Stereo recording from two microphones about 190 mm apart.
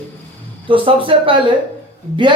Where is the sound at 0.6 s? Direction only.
25° right (ahead or behind).